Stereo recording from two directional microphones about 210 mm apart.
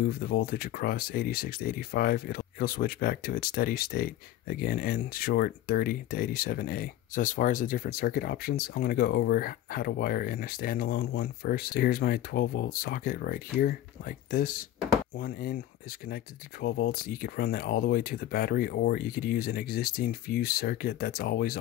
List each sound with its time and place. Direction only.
0.0 s speech: 45° left (ahead or behind)